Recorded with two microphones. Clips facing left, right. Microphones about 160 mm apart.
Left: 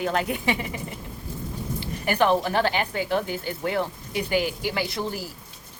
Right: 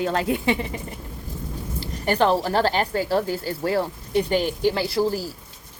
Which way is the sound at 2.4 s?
35° right (ahead or behind).